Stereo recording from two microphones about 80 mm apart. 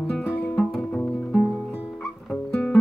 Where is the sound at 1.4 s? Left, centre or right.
Centre.